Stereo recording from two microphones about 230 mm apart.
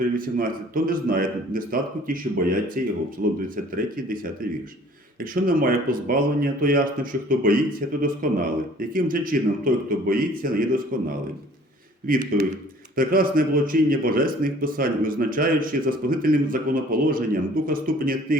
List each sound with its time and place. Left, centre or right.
0.2 s speech: right
5.2 s speech: right
12.0 s speech: right